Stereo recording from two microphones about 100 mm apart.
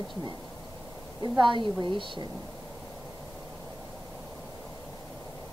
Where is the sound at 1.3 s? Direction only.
50° right (ahead or behind).